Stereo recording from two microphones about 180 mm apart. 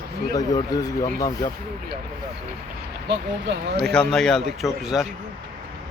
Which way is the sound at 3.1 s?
70° right (ahead or behind).